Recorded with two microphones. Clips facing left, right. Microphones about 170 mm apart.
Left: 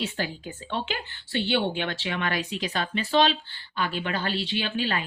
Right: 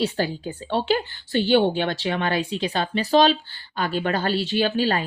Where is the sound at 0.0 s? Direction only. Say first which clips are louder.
Right 7 dB; 35° right (ahead or behind).